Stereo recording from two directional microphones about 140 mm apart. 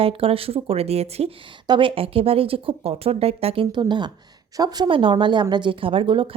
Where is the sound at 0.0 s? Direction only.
45° right (ahead or behind).